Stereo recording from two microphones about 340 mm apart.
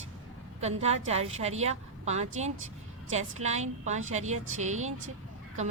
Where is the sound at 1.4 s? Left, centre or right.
Centre.